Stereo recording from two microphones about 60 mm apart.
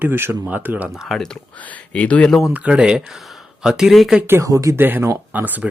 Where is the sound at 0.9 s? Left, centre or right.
Centre.